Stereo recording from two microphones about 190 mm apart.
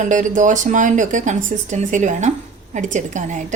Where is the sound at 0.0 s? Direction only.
40° right (ahead or behind).